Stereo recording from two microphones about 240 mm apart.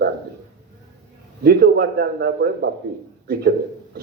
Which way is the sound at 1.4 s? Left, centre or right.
Right.